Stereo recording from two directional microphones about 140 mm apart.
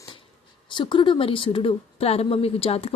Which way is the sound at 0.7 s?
35° left (ahead or behind).